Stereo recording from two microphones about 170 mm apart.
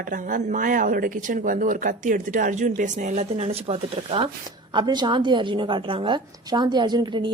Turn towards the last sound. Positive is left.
turn(degrees=-25)  # may be behind; listen again after turning